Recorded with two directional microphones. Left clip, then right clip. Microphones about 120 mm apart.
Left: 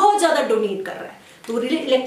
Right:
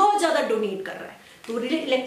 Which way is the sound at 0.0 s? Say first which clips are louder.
Left 4 dB; 5° left (ahead or behind).